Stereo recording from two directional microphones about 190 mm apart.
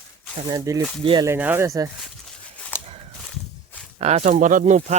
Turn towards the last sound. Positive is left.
turn(degrees=-35)  # may be behind; listen again after turning